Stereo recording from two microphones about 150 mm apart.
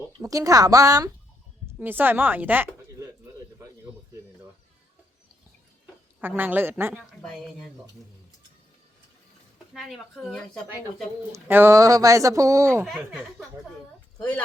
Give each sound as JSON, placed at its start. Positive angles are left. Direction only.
{"t": 0.2, "sound": "speech", "side_deg": -20}
{"t": 1.8, "sound": "speech", "side_deg": -15}
{"t": 5.8, "sound": "speech", "side_deg": -10}
{"t": 9.7, "sound": "speech", "side_deg": 0}
{"t": 11.3, "sound": "speech", "side_deg": -15}
{"t": 12.8, "sound": "speech", "side_deg": -5}
{"t": 14.2, "sound": "speech", "side_deg": 10}